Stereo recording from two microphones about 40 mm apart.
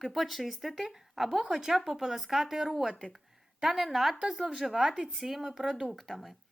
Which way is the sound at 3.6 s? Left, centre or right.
Centre.